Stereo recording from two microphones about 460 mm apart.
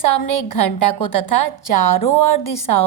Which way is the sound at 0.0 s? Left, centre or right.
Left.